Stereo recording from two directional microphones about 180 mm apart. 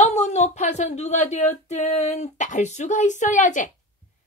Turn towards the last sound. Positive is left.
turn(degrees=45)  # may be behind; listen again after turning